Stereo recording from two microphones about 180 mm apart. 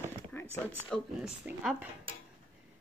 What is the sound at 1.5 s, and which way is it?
Speech, 10° right (ahead or behind).